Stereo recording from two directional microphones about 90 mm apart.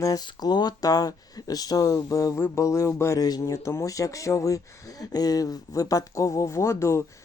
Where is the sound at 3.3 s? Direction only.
45° left (ahead or behind).